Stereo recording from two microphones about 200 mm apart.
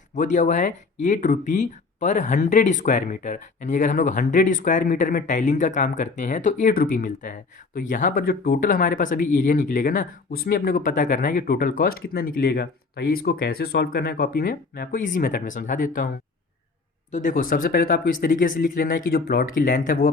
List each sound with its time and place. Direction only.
0.1 s speech: 40° left (ahead or behind)
17.1 s speech: 40° left (ahead or behind)